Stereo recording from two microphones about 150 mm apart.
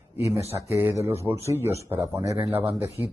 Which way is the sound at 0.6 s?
15° right (ahead or behind).